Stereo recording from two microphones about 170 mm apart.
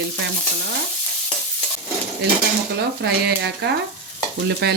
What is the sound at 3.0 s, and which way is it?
Speech, 80° right.